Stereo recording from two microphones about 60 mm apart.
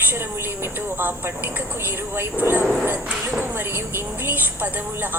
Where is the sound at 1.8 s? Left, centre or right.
Right.